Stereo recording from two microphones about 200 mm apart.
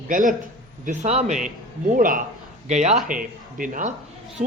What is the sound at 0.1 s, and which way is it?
A man's voice, 40° right (ahead or behind).